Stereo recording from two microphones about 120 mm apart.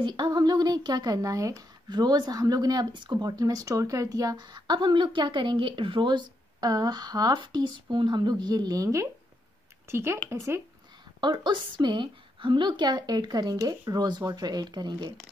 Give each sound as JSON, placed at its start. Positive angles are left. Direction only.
{"t": 0.0, "sound": "a woman's voice", "side_deg": -35}
{"t": 11.1, "sound": "a woman's voice", "side_deg": -40}